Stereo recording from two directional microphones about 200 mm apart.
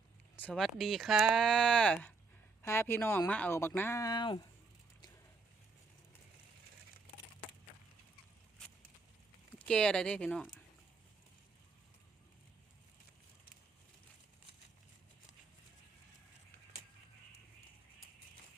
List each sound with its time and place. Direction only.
0.3 s speech: 5° left (ahead or behind)
9.6 s speech: 5° left (ahead or behind)